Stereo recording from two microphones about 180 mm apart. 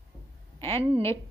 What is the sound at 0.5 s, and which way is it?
Speech, 15° left (ahead or behind).